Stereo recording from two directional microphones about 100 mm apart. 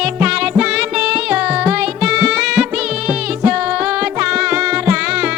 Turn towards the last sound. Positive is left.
turn(degrees=-10)  # may be behind; listen again after turning